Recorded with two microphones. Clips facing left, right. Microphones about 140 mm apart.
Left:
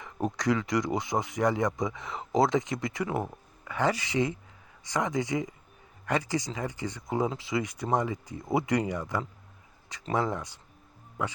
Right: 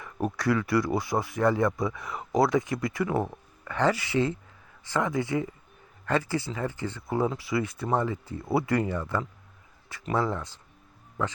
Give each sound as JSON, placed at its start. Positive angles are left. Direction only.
{"t": 0.0, "sound": "speech", "side_deg": 20}